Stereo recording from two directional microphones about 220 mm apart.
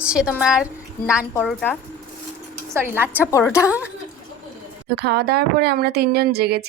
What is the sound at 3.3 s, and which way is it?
Speech, 15° left (ahead or behind).